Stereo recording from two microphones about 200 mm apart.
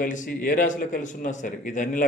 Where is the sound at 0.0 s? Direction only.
40° left (ahead or behind).